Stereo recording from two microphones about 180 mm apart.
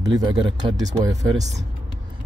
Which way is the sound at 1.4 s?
40° right (ahead or behind).